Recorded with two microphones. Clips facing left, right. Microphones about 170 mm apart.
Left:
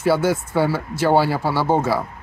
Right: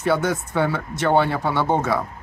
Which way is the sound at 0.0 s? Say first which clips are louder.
Left 3 dB; 5° left (ahead or behind).